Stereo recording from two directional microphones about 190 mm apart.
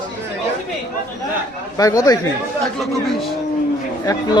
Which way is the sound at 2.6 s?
Centre (ahead or behind).